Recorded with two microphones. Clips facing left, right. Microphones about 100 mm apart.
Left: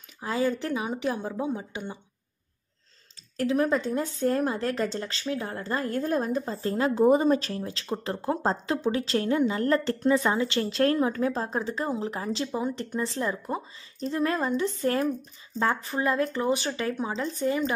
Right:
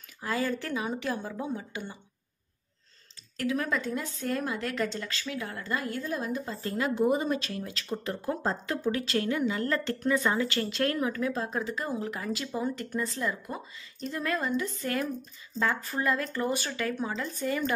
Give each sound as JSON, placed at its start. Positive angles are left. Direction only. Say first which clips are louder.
{"t": 0.2, "sound": "speech", "louder": "left 4 dB", "side_deg": 20}
{"t": 3.3, "sound": "speech", "louder": "left 5 dB", "side_deg": 30}
{"t": 6.3, "sound": "speech", "louder": "left 5 dB", "side_deg": 30}
{"t": 15.6, "sound": "speech", "louder": "left 3 dB", "side_deg": 20}